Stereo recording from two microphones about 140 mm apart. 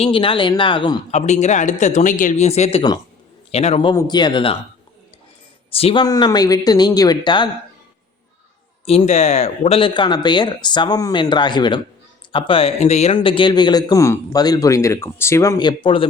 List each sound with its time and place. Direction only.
0.0 s speech: 40° left (ahead or behind)
1.1 s speech: 55° left (ahead or behind)
3.9 s speech: 30° left (ahead or behind)
5.7 s a man's voice: 40° left (ahead or behind)
8.9 s speech: 50° left (ahead or behind)
13.1 s a man's voice: 35° left (ahead or behind)